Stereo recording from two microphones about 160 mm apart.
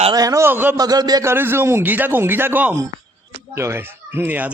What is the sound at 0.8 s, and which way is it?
Speech, 25° right (ahead or behind).